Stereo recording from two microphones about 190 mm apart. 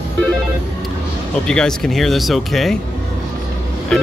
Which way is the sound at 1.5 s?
5° left (ahead or behind).